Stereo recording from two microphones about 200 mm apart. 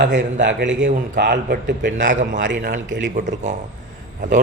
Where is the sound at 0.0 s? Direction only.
65° right (ahead or behind).